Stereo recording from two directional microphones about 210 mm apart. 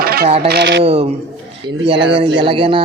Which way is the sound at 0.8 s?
30° right (ahead or behind).